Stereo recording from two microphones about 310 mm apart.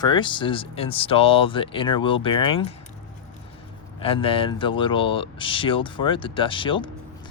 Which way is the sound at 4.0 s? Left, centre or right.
Centre.